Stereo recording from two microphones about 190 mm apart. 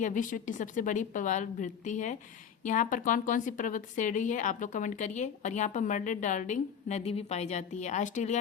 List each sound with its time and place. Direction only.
0.0 s a woman's voice: 45° left (ahead or behind)